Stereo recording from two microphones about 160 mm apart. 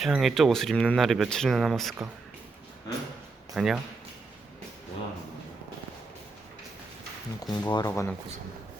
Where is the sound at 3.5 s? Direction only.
5° right (ahead or behind).